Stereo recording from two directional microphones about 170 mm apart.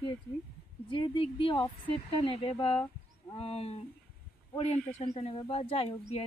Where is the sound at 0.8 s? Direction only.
30° left (ahead or behind).